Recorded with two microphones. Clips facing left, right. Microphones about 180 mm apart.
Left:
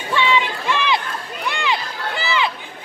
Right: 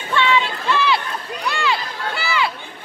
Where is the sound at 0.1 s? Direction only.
15° left (ahead or behind).